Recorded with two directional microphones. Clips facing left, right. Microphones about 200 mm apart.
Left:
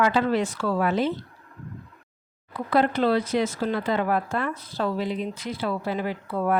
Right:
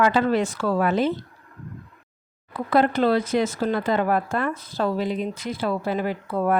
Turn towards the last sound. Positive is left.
turn(degrees=-45)  # may be behind; listen again after turning